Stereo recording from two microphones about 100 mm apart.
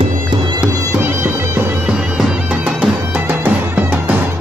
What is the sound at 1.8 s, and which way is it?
Music, 10° right (ahead or behind).